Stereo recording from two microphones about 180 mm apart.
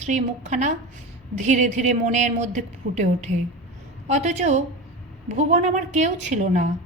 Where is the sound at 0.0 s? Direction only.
40° right (ahead or behind).